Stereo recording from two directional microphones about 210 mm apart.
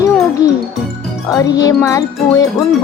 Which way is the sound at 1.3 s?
15° left (ahead or behind).